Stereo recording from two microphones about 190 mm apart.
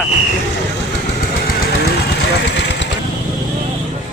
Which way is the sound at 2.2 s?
65° left (ahead or behind).